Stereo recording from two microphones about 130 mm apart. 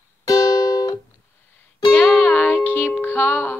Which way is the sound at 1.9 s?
15° left (ahead or behind).